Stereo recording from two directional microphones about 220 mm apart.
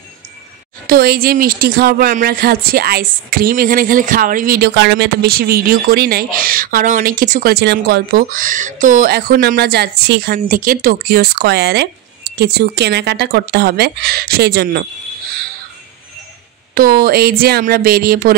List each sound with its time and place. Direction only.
0.8 s speech: 40° right (ahead or behind)
16.7 s speech: 45° right (ahead or behind)